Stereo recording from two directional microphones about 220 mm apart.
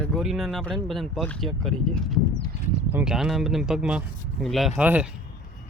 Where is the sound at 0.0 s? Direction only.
Centre (ahead or behind).